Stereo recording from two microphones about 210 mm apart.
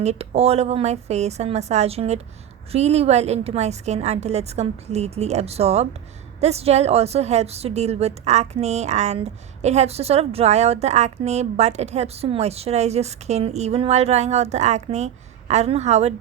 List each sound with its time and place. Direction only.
0.0 s a woman's voice: 30° right (ahead or behind)